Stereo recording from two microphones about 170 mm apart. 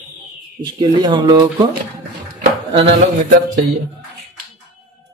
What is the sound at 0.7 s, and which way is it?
Speech, 25° right (ahead or behind).